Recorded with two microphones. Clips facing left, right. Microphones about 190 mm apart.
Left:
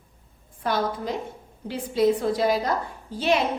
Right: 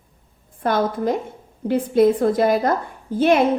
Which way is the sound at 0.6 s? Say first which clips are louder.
Right 6 dB; 50° right (ahead or behind).